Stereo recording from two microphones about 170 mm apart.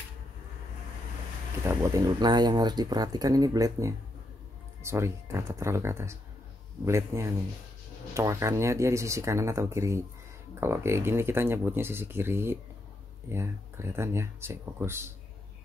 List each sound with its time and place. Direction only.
1.6 s speech: 20° right (ahead or behind)